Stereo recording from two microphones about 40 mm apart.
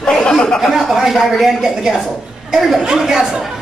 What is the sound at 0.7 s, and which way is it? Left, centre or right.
Speech, centre.